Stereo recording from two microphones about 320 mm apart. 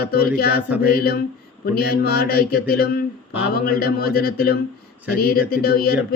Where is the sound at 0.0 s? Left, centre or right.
Left.